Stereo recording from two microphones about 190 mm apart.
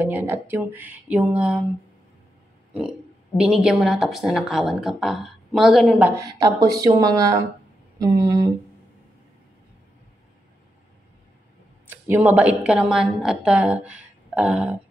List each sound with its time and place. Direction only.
0.0 s a woman's voice: 10° right (ahead or behind)
2.7 s a woman's voice: 5° right (ahead or behind)
6.3 s a woman's voice: 20° right (ahead or behind)
12.1 s a woman's voice: 10° right (ahead or behind)